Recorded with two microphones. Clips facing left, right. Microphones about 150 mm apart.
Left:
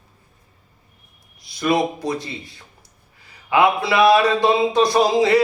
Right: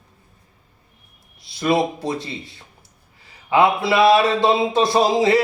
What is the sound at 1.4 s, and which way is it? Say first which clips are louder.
Speech: even; 25° right (ahead or behind).